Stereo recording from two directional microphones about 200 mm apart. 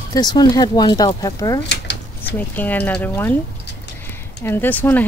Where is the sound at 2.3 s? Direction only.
10° left (ahead or behind).